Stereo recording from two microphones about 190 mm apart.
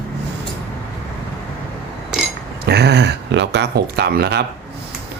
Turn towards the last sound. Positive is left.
turn(degrees=-55)  # may be behind; listen again after turning